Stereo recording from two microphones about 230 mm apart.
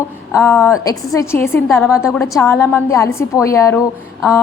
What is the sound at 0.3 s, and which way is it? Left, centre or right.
A woman's voice, centre.